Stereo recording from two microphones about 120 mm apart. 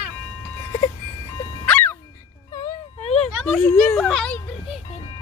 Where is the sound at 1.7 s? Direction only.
10° left (ahead or behind).